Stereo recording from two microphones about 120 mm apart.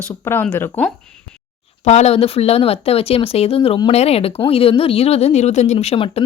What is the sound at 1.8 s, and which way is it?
Speech, 65° left (ahead or behind).